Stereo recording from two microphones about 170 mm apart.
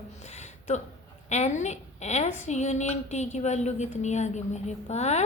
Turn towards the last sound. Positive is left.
turn(degrees=40)  # may be behind; listen again after turning